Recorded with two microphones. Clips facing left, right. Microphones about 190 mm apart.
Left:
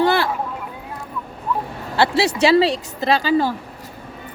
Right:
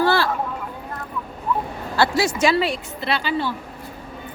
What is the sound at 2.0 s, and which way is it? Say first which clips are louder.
Speech: left 2 dB; 30° left (ahead or behind).